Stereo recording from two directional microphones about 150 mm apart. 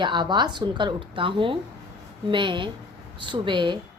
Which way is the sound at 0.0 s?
30° right (ahead or behind).